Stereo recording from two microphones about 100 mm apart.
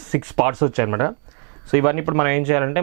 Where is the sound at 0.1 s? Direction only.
20° right (ahead or behind).